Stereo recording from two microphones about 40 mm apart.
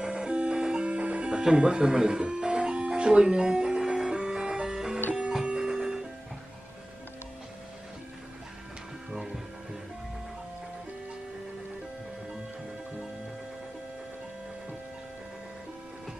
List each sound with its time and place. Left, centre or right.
0.0 s music: right
0.8 s music: right
9.1 s music: centre